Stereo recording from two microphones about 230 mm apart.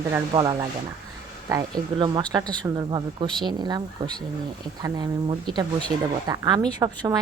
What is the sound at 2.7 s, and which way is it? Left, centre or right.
Speech, centre.